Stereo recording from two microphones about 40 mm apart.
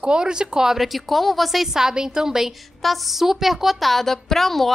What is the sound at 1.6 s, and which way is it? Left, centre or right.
Speech, centre.